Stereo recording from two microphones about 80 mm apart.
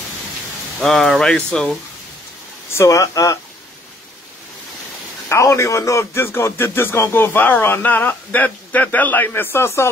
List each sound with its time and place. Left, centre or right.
0.7 s speech: centre
2.7 s speech: left
5.3 s speech: left